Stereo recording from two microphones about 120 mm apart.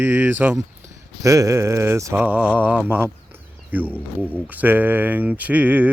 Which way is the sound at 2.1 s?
10° right (ahead or behind).